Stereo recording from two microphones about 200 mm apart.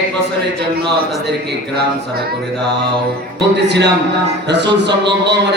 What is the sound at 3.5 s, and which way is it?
Speech, 60° right (ahead or behind).